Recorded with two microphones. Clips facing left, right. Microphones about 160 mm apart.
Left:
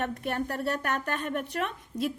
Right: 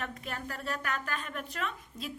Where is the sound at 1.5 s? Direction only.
70° left (ahead or behind).